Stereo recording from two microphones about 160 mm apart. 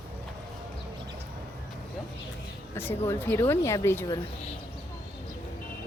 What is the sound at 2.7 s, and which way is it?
A woman's voice, 15° left (ahead or behind).